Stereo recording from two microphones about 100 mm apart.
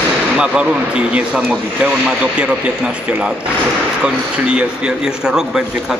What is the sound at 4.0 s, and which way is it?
A man's voice, 10° right (ahead or behind).